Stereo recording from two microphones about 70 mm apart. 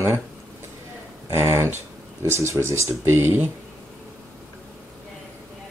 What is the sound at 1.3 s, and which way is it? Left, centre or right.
Speech, right.